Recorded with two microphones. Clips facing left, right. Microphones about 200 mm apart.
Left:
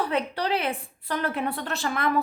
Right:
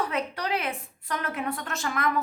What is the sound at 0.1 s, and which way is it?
A woman's voice, 30° left (ahead or behind).